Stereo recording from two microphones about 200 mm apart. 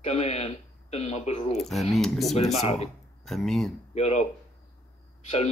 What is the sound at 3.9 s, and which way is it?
Speech, 30° left (ahead or behind).